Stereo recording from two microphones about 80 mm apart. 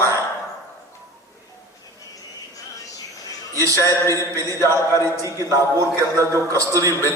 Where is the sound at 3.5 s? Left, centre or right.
Right.